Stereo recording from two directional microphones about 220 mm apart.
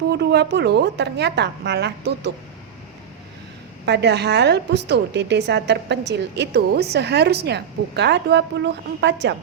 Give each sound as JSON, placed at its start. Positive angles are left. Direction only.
{"t": 0.1, "sound": "a woman's voice", "side_deg": -50}
{"t": 3.8, "sound": "a woman's voice", "side_deg": -50}